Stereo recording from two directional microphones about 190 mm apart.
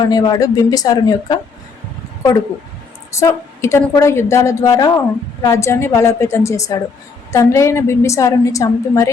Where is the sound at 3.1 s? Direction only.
15° left (ahead or behind).